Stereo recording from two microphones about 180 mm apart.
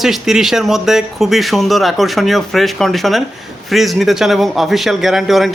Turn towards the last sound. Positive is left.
turn(degrees=0)  # may be behind; listen again after turning